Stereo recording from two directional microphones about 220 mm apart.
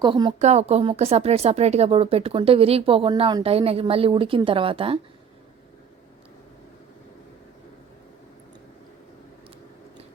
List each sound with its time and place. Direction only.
0.0 s speech: 20° right (ahead or behind)